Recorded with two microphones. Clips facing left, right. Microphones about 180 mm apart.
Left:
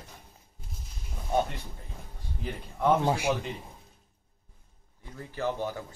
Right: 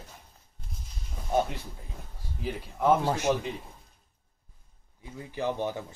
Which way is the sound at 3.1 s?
10° left (ahead or behind).